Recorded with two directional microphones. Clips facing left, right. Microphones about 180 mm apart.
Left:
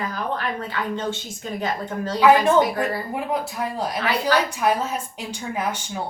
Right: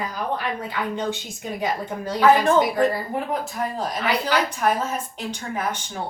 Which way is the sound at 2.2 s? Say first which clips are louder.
Left 1 dB; 10° left (ahead or behind).